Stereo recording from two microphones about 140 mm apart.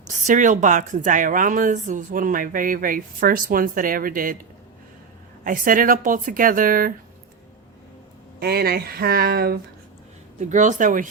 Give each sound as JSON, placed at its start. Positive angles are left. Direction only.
{"t": 0.3, "sound": "speech", "side_deg": -65}
{"t": 5.4, "sound": "speech", "side_deg": -80}
{"t": 8.4, "sound": "speech", "side_deg": -90}
{"t": 10.4, "sound": "speech", "side_deg": -60}